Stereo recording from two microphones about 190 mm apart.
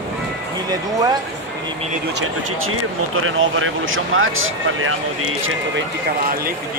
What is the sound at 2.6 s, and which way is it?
Speech, 90° right.